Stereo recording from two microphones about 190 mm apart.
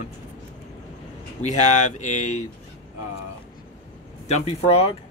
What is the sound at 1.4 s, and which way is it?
Speech, 40° left (ahead or behind).